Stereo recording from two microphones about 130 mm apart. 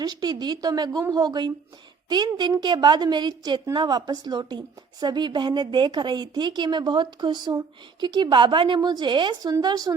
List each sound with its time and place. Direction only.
0.0 s a woman's voice: 30° right (ahead or behind)